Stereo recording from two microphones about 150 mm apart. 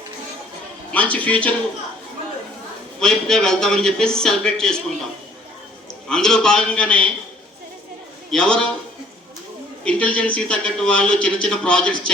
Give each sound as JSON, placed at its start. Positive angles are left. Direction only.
{"t": 0.9, "sound": "a man's voice", "side_deg": 10}
{"t": 3.0, "sound": "a man's voice", "side_deg": 5}
{"t": 6.1, "sound": "a man's voice", "side_deg": 5}
{"t": 8.3, "sound": "a man's voice", "side_deg": 5}
{"t": 9.8, "sound": "a man's voice", "side_deg": 10}